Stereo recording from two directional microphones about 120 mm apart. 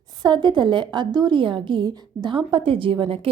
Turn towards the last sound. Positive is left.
turn(degrees=-50)  # may be behind; listen again after turning